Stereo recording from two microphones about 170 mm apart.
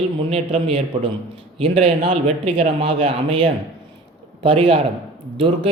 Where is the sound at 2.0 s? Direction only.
45° right (ahead or behind).